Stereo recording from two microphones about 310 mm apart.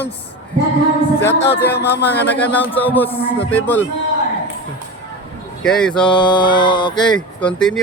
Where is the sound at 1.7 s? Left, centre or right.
Left.